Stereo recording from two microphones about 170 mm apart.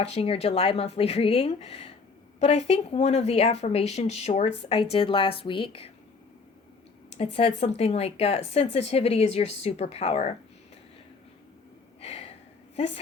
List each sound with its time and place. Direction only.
0.0 s speech: 35° left (ahead or behind)
7.3 s speech: 35° left (ahead or behind)
11.9 s a sound: 40° left (ahead or behind)
12.7 s a woman's voice: 35° left (ahead or behind)